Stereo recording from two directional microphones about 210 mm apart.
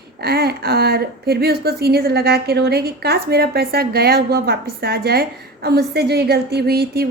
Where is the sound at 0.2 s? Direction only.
50° right (ahead or behind).